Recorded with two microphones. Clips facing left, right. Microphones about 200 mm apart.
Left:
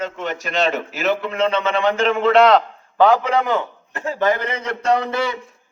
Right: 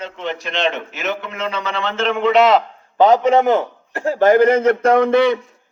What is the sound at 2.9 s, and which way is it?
Speech, 20° right (ahead or behind).